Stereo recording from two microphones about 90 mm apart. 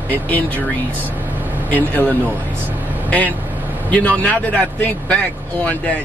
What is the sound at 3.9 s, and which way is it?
Speech, 15° left (ahead or behind).